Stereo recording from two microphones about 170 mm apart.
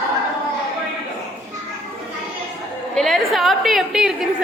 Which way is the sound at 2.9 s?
Centre (ahead or behind).